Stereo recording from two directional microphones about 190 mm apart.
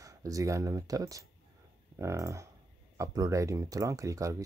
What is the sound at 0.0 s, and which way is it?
Speech, 15° right (ahead or behind).